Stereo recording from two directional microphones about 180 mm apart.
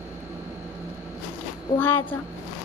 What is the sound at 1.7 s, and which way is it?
Speech, 10° left (ahead or behind).